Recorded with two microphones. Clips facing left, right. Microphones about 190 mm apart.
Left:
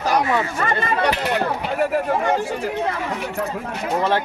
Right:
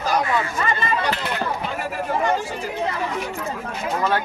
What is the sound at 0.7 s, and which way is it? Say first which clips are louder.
Speech: left 3 dB; 55° left (ahead or behind).